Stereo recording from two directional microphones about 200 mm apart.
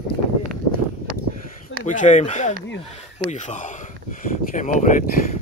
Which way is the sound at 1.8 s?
40° left (ahead or behind).